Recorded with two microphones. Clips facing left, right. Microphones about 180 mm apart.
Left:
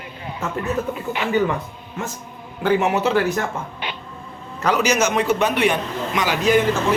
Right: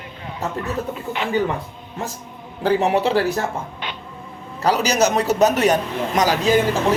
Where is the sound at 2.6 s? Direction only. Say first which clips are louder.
Right 1 dB; 35° right (ahead or behind).